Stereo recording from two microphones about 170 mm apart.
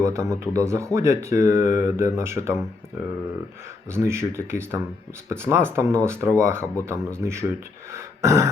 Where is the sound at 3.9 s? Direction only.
15° right (ahead or behind).